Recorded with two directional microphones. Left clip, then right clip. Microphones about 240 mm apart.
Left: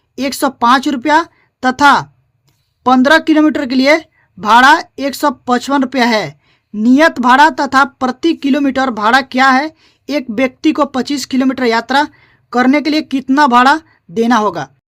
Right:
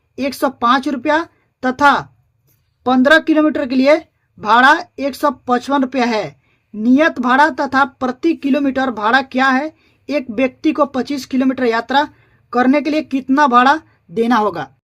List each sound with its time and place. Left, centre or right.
0.2 s a woman's voice: left